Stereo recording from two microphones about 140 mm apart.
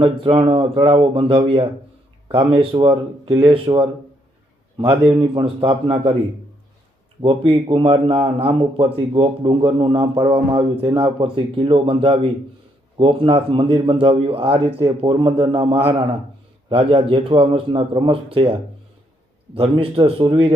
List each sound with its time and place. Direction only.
0.0 s a man's voice: 40° right (ahead or behind)
4.9 s a man's voice: 40° right (ahead or behind)
7.2 s a man's voice: 40° right (ahead or behind)
19.5 s a man's voice: 40° right (ahead or behind)